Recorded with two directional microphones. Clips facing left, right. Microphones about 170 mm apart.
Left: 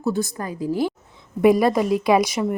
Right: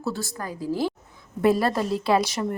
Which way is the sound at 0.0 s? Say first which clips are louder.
Left 6 dB; 20° left (ahead or behind).